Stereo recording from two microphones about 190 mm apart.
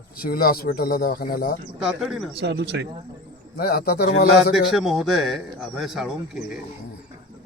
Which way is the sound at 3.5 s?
55° left (ahead or behind).